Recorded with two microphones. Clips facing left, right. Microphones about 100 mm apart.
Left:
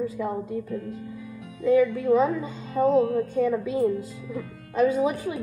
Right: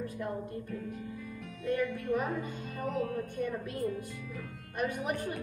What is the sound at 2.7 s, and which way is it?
Music, 20° left (ahead or behind).